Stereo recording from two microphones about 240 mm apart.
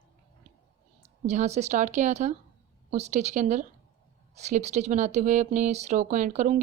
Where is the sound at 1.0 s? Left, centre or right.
Right.